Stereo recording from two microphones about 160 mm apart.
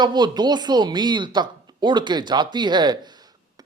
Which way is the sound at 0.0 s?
25° right (ahead or behind).